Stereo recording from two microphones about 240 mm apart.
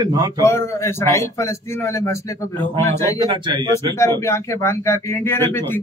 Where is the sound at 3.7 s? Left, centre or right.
Centre.